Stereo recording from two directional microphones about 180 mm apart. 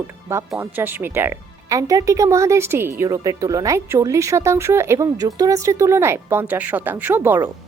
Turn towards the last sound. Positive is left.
turn(degrees=-10)  # may be behind; listen again after turning